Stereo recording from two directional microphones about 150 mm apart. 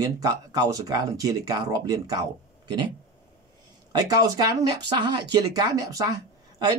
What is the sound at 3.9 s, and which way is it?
Speech, 25° right (ahead or behind).